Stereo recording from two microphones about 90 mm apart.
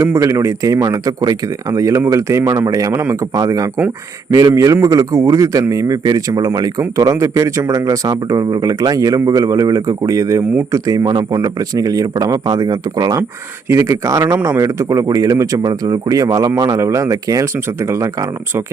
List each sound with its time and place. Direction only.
0.0 s speech: 35° right (ahead or behind)
13.7 s speech: 35° right (ahead or behind)